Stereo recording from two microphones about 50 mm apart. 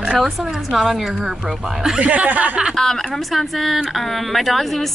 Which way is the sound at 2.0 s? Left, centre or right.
Right.